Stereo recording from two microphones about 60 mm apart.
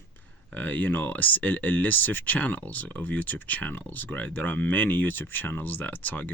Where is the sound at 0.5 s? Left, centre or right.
Left.